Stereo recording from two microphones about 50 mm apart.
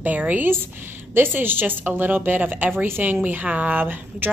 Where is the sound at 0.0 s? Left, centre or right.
Right.